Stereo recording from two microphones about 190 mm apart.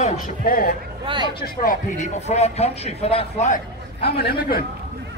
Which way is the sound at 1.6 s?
35° left (ahead or behind).